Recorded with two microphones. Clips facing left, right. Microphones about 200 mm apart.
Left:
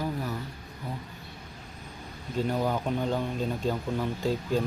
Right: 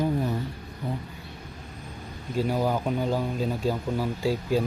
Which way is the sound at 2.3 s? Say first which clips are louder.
Right 2 dB; 5° right (ahead or behind).